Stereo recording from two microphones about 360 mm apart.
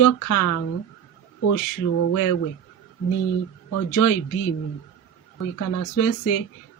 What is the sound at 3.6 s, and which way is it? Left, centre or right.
Speech, left.